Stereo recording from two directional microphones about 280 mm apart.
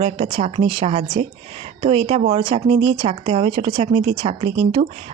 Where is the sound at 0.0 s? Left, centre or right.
Right.